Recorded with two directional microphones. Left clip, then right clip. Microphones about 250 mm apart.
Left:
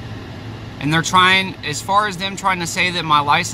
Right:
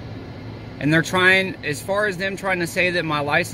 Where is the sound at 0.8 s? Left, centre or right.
Centre.